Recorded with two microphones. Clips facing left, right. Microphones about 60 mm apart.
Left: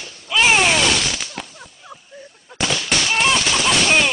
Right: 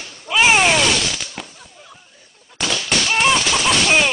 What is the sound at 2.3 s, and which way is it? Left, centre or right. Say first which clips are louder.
Speech: left 1 dB; centre.